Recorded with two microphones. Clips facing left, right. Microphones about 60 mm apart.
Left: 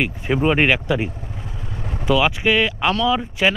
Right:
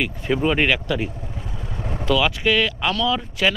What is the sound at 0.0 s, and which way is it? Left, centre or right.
Speech, centre.